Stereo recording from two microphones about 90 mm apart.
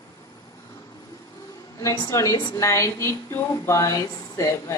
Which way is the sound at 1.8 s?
35° left (ahead or behind).